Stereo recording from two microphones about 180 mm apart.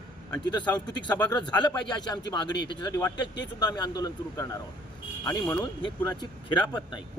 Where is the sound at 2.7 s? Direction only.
20° left (ahead or behind).